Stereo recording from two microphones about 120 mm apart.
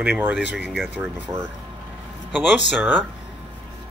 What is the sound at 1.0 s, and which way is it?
Speech, 20° right (ahead or behind).